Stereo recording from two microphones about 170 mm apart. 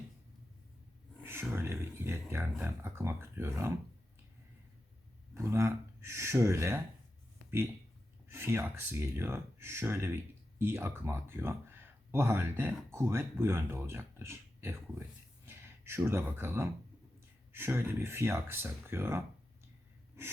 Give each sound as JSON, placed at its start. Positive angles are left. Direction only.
{"t": 1.2, "sound": "speech", "side_deg": -15}
{"t": 5.3, "sound": "speech", "side_deg": -15}
{"t": 8.3, "sound": "speech", "side_deg": -15}